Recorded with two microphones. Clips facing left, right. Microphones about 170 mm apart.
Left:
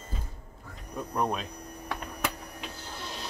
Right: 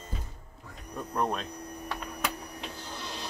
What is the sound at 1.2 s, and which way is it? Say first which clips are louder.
Speech: even; 5° left (ahead or behind).